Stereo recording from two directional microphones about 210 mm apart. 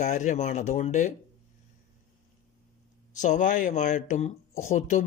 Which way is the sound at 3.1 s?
35° left (ahead or behind).